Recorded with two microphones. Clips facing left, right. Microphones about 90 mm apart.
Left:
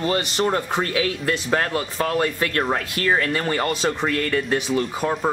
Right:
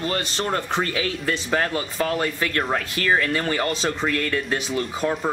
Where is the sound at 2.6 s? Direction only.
5° left (ahead or behind).